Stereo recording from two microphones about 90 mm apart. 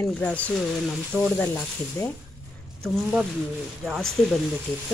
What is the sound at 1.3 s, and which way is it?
Speech, 25° left (ahead or behind).